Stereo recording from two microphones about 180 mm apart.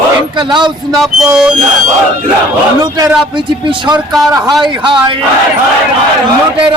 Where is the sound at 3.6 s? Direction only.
25° right (ahead or behind).